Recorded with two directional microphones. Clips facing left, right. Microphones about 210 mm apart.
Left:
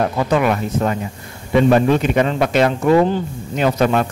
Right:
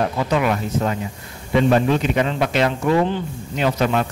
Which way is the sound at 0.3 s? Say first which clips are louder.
Left 3 dB; 50° left (ahead or behind).